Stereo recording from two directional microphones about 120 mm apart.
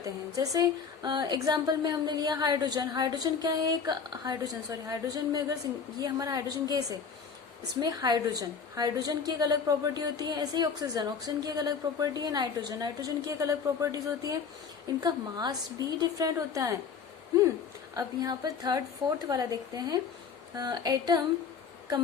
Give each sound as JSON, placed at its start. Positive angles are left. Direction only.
{"t": 0.0, "sound": "a woman's voice", "side_deg": -30}
{"t": 17.9, "sound": "a woman's voice", "side_deg": -30}